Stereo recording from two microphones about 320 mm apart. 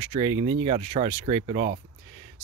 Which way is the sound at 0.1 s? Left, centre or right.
Centre.